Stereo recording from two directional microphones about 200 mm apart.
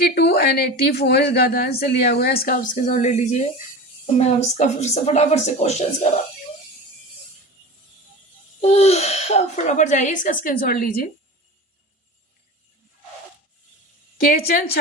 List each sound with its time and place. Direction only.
0.0 s a woman's voice: 50° left (ahead or behind); by 6.1 s 35° left (ahead or behind)
8.6 s a child's voice: 35° left (ahead or behind)
14.2 s a woman's voice: 50° left (ahead or behind)